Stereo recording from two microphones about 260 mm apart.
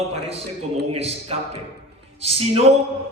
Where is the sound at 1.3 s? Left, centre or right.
Right.